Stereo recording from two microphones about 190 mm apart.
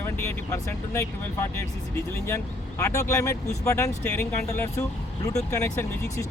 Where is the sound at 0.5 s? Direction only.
15° left (ahead or behind).